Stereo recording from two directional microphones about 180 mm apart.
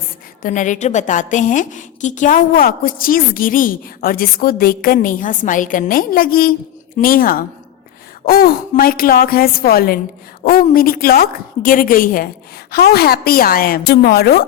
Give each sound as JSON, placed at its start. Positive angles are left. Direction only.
{"t": 0.4, "sound": "a woman's voice", "side_deg": 45}